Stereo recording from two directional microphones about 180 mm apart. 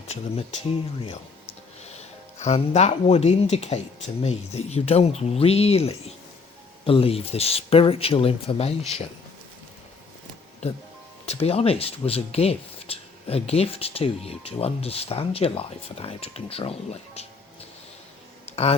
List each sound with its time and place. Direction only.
2.4 s speech: 40° left (ahead or behind)
10.6 s speech: 35° left (ahead or behind)
18.5 s speech: 35° left (ahead or behind)